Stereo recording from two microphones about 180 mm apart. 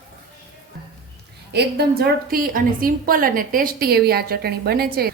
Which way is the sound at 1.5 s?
60° right (ahead or behind).